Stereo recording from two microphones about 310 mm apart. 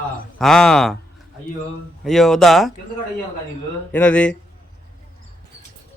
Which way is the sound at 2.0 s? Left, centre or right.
Centre.